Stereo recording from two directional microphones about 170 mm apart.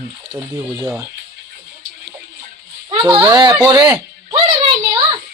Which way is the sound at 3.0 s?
20° right (ahead or behind).